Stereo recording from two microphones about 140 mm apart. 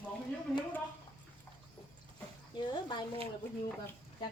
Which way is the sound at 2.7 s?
35° left (ahead or behind).